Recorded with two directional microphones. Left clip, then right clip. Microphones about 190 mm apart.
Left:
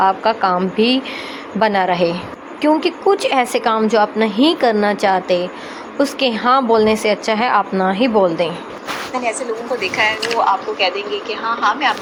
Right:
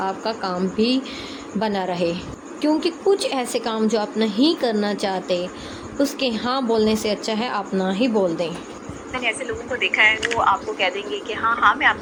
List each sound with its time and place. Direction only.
0.0 s a woman's voice: centre (ahead or behind)
9.8 s speech: 30° left (ahead or behind)
10.9 s speech: 15° right (ahead or behind)
11.6 s speech: 20° left (ahead or behind)